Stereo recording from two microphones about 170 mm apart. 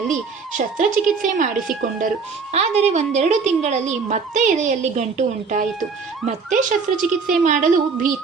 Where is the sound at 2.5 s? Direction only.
40° right (ahead or behind).